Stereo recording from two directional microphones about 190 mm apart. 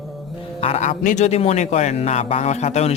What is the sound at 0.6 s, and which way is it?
A man's voice, 35° left (ahead or behind).